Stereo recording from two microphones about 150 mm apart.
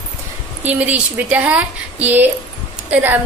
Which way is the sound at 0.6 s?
10° right (ahead or behind).